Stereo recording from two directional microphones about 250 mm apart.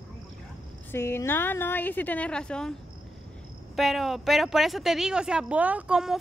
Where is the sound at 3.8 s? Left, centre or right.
Centre.